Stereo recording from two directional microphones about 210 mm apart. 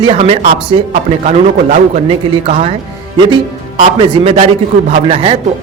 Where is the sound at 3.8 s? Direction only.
25° right (ahead or behind).